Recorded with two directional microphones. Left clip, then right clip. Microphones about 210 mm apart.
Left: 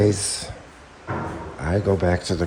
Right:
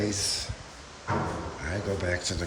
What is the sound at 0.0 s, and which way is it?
Speech, 20° left (ahead or behind).